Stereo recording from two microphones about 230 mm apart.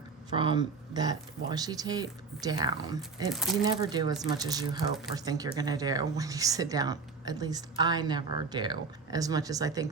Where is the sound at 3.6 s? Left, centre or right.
Centre.